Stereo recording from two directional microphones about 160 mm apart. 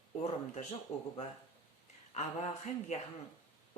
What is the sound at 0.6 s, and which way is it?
Speech, 45° left (ahead or behind).